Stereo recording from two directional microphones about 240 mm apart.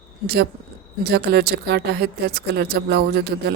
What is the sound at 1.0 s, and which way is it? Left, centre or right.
A woman's voice, right.